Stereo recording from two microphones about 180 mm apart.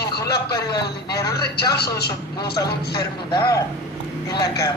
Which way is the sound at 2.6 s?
15° left (ahead or behind).